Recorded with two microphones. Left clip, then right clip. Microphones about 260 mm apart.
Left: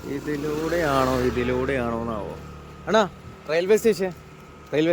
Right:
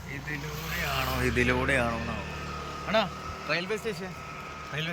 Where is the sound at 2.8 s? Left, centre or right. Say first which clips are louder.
Left 7 dB; left.